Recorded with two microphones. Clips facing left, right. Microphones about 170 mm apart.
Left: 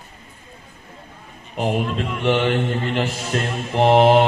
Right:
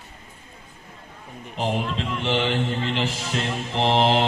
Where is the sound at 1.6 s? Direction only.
50° left (ahead or behind).